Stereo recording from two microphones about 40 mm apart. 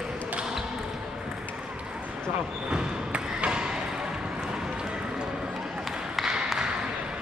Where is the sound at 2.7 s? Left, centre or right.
Right.